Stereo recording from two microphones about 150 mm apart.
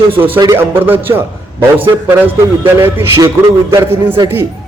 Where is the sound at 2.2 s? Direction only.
15° right (ahead or behind).